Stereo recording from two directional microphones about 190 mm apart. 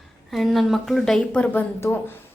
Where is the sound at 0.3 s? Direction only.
Centre (ahead or behind).